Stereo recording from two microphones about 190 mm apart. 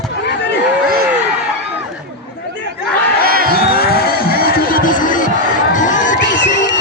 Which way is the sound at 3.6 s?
55° left (ahead or behind).